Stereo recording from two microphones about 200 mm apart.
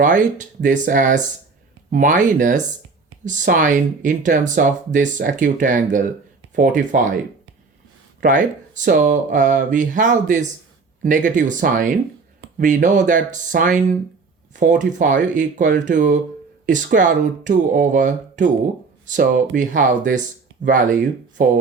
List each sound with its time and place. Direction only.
0.0 s speech: 40° right (ahead or behind)
8.2 s speech: 40° right (ahead or behind)
21.4 s speech: 40° right (ahead or behind)